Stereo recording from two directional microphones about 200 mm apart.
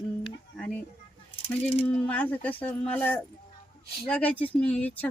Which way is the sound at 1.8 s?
5° left (ahead or behind).